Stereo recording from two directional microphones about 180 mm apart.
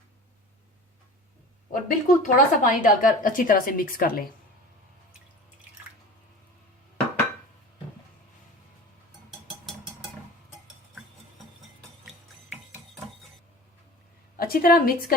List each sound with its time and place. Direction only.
1.7 s speech: 45° left (ahead or behind)
11.8 s music: centre (ahead or behind)
14.3 s a woman's voice: 55° left (ahead or behind)